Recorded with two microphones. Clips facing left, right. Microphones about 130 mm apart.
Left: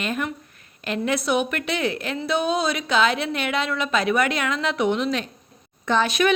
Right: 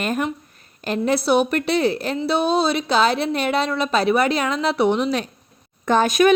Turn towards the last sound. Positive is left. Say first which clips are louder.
# right 4 dB
turn(degrees=-45)  # may be behind; listen again after turning